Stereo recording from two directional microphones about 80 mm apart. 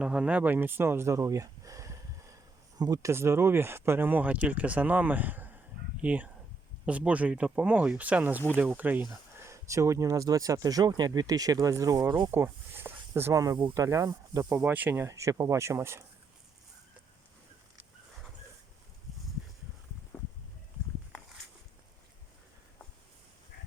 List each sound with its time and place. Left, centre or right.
0.0 s a sound: centre; by 2.8 s right
3.0 s speech: right
9.4 s speech: right
12.3 s speech: right
13.3 s speech: right
14.5 s speech: right
15.0 s speech: right
20.1 s a sound: left